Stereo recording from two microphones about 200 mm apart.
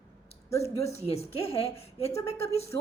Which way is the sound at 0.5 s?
15° left (ahead or behind).